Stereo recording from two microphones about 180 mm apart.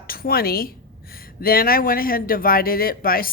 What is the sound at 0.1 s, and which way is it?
A woman's voice, 55° left (ahead or behind).